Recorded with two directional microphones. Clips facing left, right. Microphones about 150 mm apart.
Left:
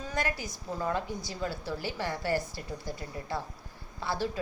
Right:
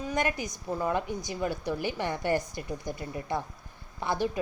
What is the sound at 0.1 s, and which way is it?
A woman's voice, 20° right (ahead or behind).